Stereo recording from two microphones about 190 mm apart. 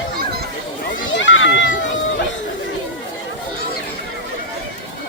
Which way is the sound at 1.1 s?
80° left.